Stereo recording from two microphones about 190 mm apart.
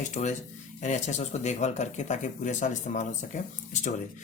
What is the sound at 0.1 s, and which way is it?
Speech, 40° left (ahead or behind).